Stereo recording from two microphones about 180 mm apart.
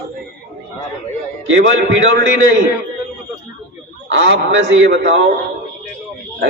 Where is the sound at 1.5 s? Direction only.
90° right.